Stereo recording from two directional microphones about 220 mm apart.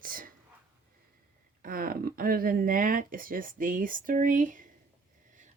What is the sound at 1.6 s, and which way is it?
Speech, 40° right (ahead or behind).